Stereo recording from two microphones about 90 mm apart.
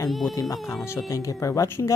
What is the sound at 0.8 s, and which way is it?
Speech, 35° left (ahead or behind).